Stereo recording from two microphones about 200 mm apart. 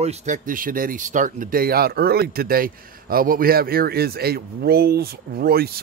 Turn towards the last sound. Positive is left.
turn(degrees=-50)  # may be behind; listen again after turning